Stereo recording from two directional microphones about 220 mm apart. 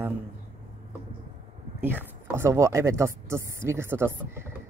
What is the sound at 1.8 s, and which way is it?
Speech, 10° right (ahead or behind).